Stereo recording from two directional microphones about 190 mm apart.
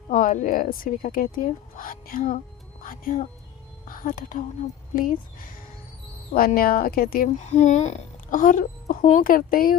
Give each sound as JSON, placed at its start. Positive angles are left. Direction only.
{"t": 0.1, "sound": "speech", "side_deg": 40}